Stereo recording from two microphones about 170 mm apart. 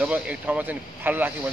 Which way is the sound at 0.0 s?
5° right (ahead or behind).